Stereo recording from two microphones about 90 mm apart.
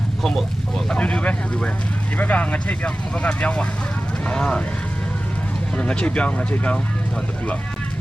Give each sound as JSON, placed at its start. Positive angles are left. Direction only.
{"t": 0.2, "sound": "speech", "side_deg": 0}
{"t": 0.9, "sound": "speech", "side_deg": 10}
{"t": 5.7, "sound": "speech", "side_deg": 10}